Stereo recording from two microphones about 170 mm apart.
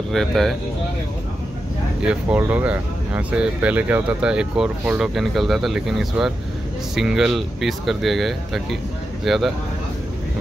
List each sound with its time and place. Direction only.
0.1 s speech: centre (ahead or behind)
2.0 s speech: 5° right (ahead or behind)